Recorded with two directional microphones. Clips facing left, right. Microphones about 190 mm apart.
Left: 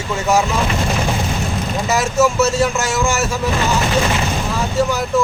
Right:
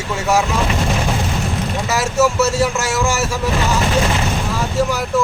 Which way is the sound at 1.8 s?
5° right (ahead or behind).